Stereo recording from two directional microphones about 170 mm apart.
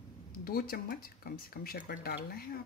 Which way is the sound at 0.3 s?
60° left (ahead or behind).